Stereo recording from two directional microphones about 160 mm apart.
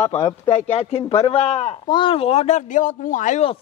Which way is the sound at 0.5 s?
40° left (ahead or behind).